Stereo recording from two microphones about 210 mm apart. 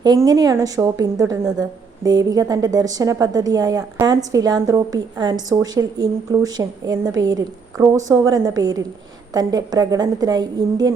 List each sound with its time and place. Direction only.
0.0 s a woman's voice: 20° right (ahead or behind)